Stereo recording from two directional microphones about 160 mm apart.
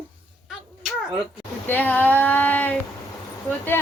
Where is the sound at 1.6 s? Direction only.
10° left (ahead or behind).